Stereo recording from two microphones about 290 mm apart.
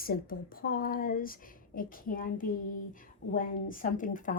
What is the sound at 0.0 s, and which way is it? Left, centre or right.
Speech, left.